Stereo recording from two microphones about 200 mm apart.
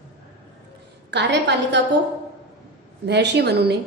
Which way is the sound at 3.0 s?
55° right (ahead or behind).